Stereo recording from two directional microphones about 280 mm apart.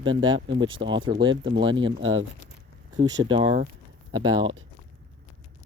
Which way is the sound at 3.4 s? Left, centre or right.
Right.